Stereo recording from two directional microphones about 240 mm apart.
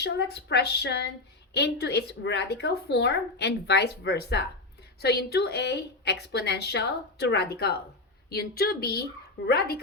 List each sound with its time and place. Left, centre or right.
0.0 s a woman's voice: left